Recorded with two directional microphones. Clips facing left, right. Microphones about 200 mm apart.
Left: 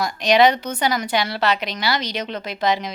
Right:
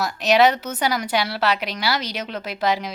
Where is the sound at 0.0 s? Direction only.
5° right (ahead or behind).